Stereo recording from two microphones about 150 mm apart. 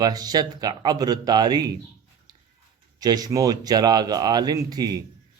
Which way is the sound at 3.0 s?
25° right (ahead or behind).